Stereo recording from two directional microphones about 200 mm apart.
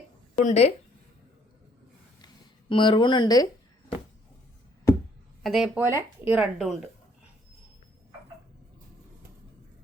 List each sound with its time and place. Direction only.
0.3 s speech: 35° left (ahead or behind)
2.2 s speech: 25° left (ahead or behind)
5.4 s speech: centre (ahead or behind)